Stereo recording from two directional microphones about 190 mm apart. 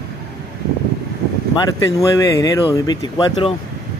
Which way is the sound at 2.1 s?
20° left (ahead or behind).